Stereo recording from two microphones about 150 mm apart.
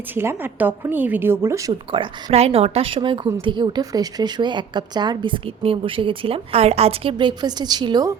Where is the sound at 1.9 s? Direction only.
35° right (ahead or behind).